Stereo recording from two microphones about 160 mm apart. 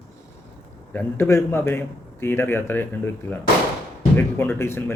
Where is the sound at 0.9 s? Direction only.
15° left (ahead or behind).